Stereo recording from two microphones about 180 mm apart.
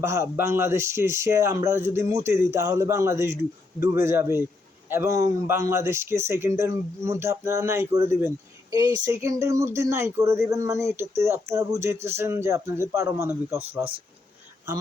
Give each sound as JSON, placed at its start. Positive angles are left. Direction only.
{"t": 0.0, "sound": "speech", "side_deg": -15}